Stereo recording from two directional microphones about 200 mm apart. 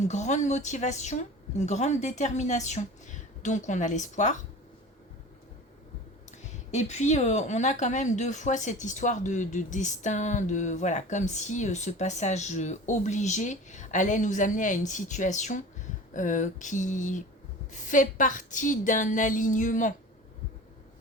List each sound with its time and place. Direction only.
0.0 s speech: 35° left (ahead or behind)
6.3 s speech: 35° left (ahead or behind)